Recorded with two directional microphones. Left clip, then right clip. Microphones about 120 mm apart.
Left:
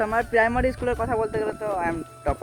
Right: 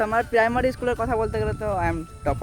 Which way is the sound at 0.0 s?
30° right (ahead or behind).